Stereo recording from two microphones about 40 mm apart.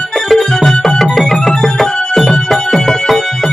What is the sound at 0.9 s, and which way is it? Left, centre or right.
Music, centre.